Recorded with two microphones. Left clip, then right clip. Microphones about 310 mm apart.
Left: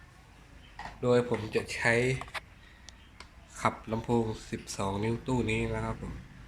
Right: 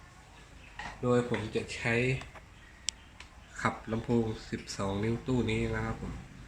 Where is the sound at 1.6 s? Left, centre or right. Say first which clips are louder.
Left 5 dB; left.